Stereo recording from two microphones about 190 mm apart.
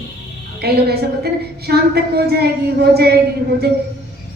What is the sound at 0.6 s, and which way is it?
A woman's voice, 55° right (ahead or behind).